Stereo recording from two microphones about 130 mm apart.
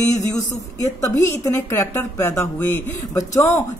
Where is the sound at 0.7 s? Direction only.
25° left (ahead or behind).